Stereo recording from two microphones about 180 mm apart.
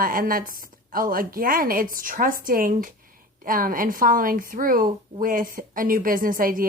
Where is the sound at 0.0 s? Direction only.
50° right (ahead or behind).